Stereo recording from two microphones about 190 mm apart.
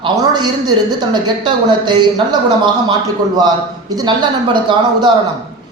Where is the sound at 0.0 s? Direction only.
20° right (ahead or behind).